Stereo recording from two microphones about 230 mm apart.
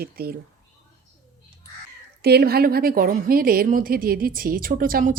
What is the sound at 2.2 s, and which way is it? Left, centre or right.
A woman's voice, right.